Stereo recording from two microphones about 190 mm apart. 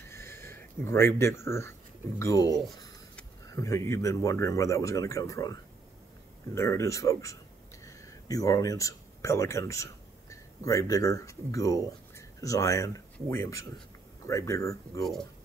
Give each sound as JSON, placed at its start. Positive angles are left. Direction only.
{"t": 0.1, "sound": "speech", "side_deg": 10}